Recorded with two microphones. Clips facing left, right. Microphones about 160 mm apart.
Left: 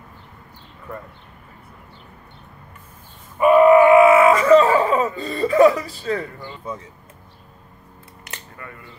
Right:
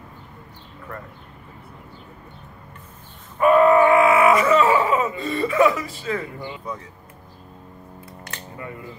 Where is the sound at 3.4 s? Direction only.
10° left (ahead or behind); by 6.2 s 35° left (ahead or behind).